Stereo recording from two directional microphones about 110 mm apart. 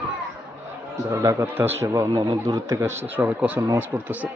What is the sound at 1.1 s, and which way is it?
Speech, 25° right (ahead or behind).